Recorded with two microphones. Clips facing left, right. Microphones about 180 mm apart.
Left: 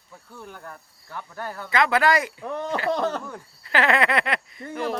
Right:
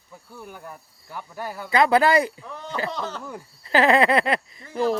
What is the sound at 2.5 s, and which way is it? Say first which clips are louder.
Speech: left 5 dB; 60° left (ahead or behind).